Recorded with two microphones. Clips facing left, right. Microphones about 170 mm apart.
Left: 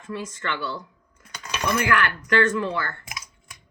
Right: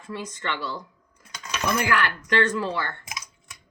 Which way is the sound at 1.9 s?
30° right (ahead or behind).